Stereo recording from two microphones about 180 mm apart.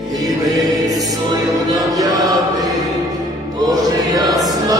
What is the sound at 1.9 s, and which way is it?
Choir, 20° right (ahead or behind).